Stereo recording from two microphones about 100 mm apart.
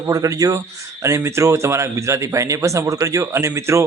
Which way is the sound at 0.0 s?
35° right (ahead or behind).